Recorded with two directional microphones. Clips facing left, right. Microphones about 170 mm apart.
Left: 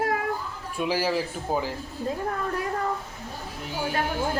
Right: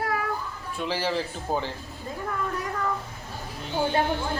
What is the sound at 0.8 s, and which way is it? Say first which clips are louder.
Speech: left 2 dB; 10° left (ahead or behind).